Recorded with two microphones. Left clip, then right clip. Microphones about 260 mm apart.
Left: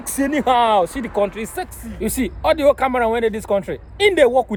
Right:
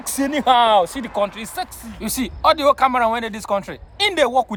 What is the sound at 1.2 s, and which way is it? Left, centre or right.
Speech, centre.